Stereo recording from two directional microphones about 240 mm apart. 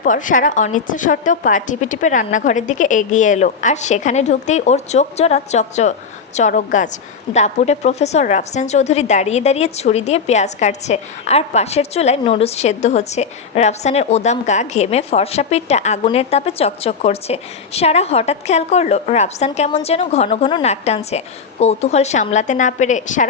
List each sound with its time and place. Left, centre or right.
0.0 s a woman's voice: left